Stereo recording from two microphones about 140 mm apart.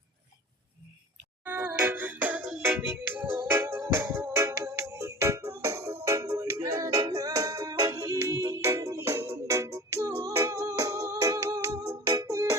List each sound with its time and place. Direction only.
1.5 s music: 10° right (ahead or behind)